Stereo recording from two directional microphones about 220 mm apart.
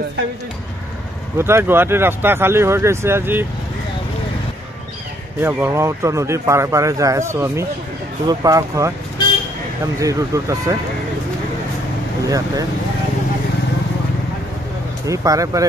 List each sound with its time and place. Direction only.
1.4 s speech: 10° right (ahead or behind)
5.4 s speech: 10° right (ahead or behind)
9.9 s speech: 15° right (ahead or behind)
12.3 s speech: 15° right (ahead or behind)
15.0 s speech: 15° right (ahead or behind)